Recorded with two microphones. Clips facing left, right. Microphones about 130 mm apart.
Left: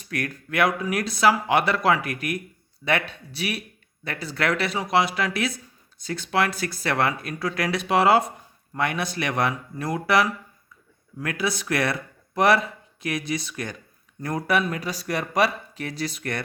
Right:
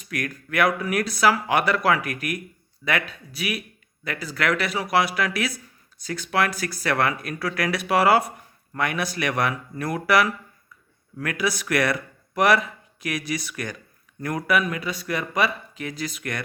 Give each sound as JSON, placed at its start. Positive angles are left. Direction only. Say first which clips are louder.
{"t": 0.0, "sound": "speech", "louder": "even", "side_deg": 30}